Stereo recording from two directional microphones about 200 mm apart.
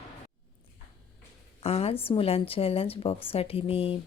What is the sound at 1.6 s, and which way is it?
A woman's voice, 30° left (ahead or behind).